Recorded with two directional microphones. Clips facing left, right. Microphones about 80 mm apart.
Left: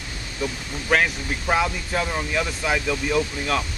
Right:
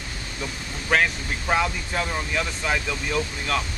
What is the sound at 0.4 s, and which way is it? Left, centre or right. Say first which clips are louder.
Speech: left 5 dB; centre.